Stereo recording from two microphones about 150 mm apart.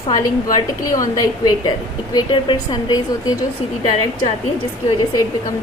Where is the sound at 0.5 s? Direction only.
25° left (ahead or behind).